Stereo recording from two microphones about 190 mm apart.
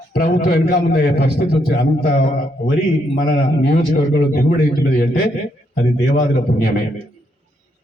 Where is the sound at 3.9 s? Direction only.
45° left (ahead or behind).